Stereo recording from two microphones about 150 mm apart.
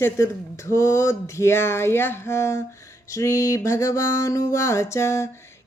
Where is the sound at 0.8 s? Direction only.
20° left (ahead or behind).